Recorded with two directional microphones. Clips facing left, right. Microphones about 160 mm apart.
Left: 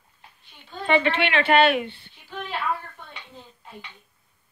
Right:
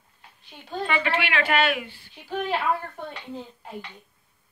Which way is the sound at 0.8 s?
30° left (ahead or behind).